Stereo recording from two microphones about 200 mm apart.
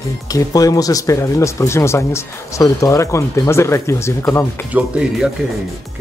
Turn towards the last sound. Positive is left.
turn(degrees=-5)  # may be behind; listen again after turning